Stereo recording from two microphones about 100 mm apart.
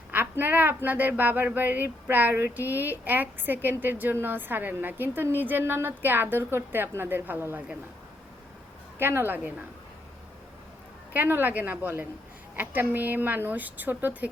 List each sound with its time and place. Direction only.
0.1 s speech: 20° right (ahead or behind)
9.0 s speech: 20° right (ahead or behind)
11.1 s a woman's voice: 20° right (ahead or behind)